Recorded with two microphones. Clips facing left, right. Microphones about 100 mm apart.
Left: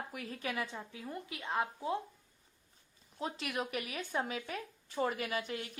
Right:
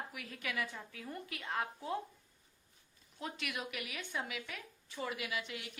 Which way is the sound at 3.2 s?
30° left (ahead or behind).